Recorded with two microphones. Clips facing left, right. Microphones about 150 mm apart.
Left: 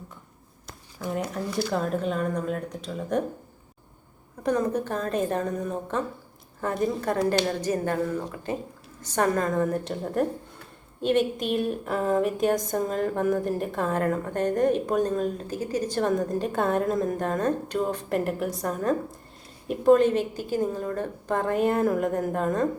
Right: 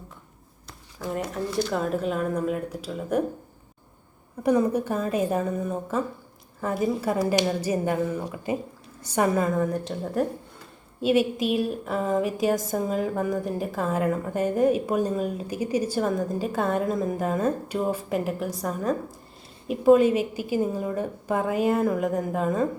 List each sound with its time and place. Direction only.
0.9 s a woman's voice: centre (ahead or behind)
4.4 s a woman's voice: 10° right (ahead or behind)